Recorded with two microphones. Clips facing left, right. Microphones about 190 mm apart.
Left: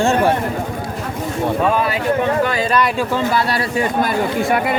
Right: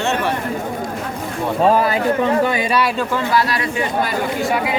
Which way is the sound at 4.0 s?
55° left (ahead or behind).